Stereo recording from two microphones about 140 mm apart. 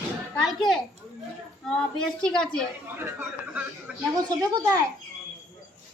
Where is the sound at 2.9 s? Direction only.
15° right (ahead or behind).